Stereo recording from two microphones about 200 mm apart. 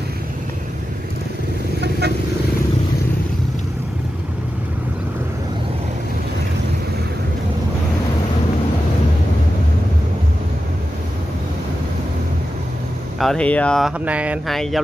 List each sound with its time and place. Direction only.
1.8 s vehicle: 55° right (ahead or behind)
13.2 s speech: 5° left (ahead or behind)